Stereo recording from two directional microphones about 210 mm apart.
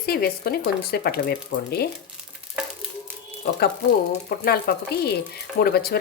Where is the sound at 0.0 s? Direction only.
45° left (ahead or behind).